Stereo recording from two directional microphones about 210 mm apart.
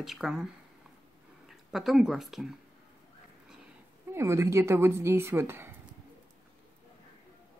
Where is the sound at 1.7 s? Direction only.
Centre (ahead or behind).